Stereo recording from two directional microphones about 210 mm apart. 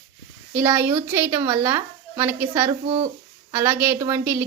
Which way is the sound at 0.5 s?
10° right (ahead or behind).